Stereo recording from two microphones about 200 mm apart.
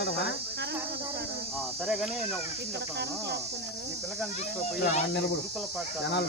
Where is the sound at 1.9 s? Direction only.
Centre (ahead or behind).